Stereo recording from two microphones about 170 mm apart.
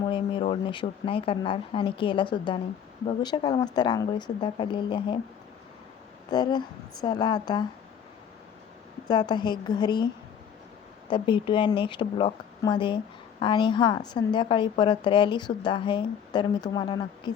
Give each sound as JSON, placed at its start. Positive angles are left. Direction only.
{"t": 0.5, "sound": "a woman's voice", "side_deg": 30}
{"t": 6.3, "sound": "a woman's voice", "side_deg": 25}
{"t": 9.0, "sound": "a woman's voice", "side_deg": 25}
{"t": 11.1, "sound": "a woman's voice", "side_deg": 30}